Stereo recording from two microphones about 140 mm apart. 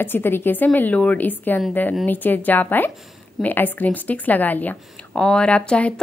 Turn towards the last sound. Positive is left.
turn(degrees=10)  # may be behind; listen again after turning